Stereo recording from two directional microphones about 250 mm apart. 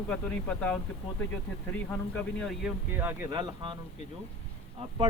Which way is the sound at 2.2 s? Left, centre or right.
Centre.